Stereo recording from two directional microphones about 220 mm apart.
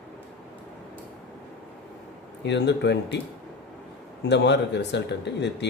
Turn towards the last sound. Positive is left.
turn(degrees=50)  # may be behind; listen again after turning